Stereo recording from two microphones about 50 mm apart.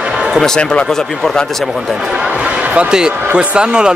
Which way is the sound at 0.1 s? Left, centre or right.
Centre.